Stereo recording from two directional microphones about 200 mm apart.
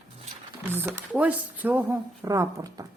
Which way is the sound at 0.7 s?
10° right (ahead or behind).